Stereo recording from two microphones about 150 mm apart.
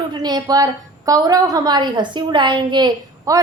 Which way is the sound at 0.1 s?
30° right (ahead or behind).